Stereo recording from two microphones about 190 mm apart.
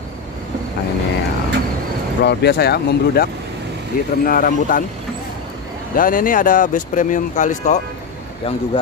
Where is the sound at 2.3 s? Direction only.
60° left (ahead or behind).